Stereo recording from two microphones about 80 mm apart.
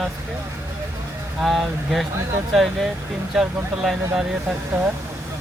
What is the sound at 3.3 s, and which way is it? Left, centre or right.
Speech, centre.